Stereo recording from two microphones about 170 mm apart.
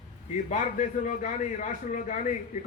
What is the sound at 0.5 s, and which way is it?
A man's voice, 45° left (ahead or behind).